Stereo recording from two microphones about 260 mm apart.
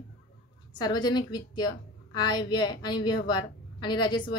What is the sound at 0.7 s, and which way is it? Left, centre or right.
A woman's voice, centre.